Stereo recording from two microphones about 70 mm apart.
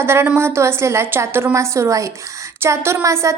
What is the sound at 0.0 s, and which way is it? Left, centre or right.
Speech, right.